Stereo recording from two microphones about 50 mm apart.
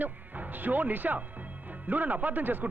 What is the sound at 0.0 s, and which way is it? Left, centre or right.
A man's voice, right.